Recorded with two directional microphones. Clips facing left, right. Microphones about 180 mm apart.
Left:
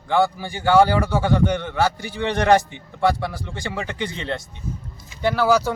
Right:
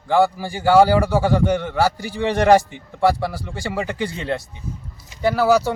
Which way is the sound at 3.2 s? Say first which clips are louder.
Right 2 dB; 5° right (ahead or behind).